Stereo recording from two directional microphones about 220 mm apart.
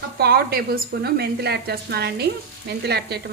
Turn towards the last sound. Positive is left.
turn(degrees=-45)  # may be behind; listen again after turning